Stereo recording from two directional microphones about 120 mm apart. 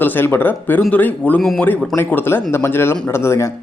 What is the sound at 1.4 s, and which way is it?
Speech, centre (ahead or behind).